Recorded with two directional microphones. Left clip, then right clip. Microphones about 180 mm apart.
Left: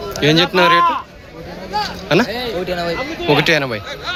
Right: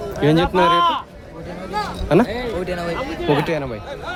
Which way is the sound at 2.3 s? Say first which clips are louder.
Left 3 dB; 25° left (ahead or behind).